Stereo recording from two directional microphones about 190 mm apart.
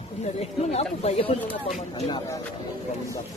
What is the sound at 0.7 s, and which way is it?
Speech, 35° left (ahead or behind).